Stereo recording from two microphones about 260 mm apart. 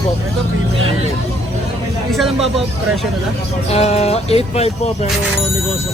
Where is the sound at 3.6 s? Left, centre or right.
Left.